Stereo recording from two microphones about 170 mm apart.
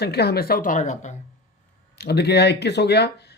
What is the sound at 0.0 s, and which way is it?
Speech, 70° left (ahead or behind).